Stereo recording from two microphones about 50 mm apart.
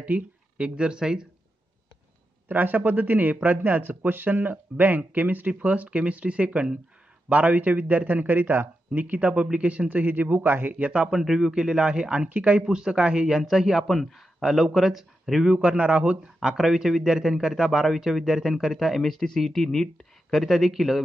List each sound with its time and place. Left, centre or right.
0.0 s speech: right
2.4 s a man's voice: right
9.2 s speech: centre
9.8 s a man's voice: right
10.8 s speech: right
11.1 s a man's voice: centre; by 12.6 s right
12.6 s a man's voice: centre
15.5 s speech: right
16.3 s a man's voice: centre
20.2 s a man's voice: centre